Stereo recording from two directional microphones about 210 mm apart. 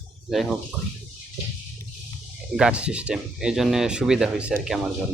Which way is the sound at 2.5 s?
5° right (ahead or behind).